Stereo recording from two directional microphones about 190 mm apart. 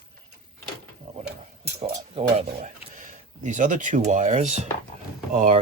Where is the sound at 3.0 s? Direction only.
40° right (ahead or behind).